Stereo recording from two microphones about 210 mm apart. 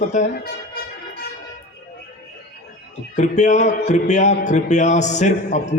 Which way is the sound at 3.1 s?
35° left (ahead or behind).